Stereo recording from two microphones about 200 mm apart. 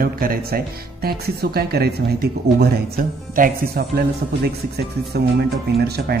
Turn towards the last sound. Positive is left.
turn(degrees=-55)  # may be behind; listen again after turning